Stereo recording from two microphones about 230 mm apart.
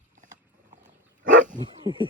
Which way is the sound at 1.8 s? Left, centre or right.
Right.